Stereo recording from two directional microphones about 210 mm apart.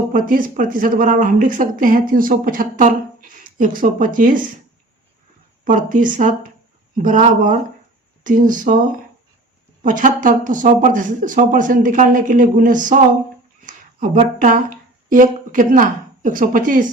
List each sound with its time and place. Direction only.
0.1 s speech: 40° right (ahead or behind)
5.6 s speech: 40° right (ahead or behind)
9.8 s speech: 40° right (ahead or behind)
13.6 s a sound: 40° right (ahead or behind)
15.1 s speech: 40° right (ahead or behind)